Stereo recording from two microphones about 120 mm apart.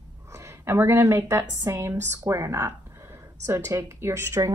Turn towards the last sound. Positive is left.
turn(degrees=-25)  # may be behind; listen again after turning